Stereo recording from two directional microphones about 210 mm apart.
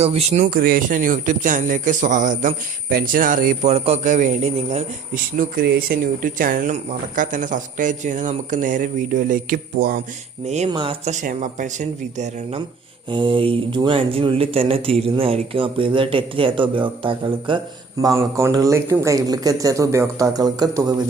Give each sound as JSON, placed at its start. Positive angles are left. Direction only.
{"t": 0.0, "sound": "a man's voice", "side_deg": -30}
{"t": 0.6, "sound": "a man's voice", "side_deg": -40}
{"t": 10.4, "sound": "a man's voice", "side_deg": -30}